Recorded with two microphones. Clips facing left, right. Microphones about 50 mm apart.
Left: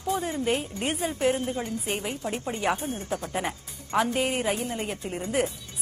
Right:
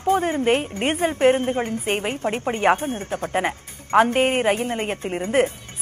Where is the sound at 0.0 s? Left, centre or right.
Right.